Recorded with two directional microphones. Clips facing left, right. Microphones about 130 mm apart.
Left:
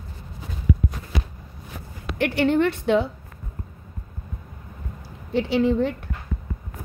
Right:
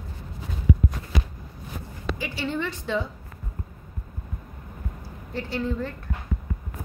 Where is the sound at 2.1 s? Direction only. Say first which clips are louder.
Left 12 dB; 65° left (ahead or behind).